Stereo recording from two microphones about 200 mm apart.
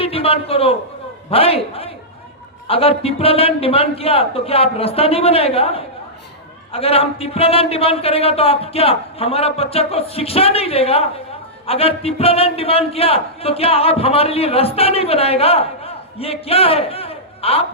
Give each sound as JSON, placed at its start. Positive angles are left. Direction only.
{"t": 0.0, "sound": "a man's voice", "side_deg": 30}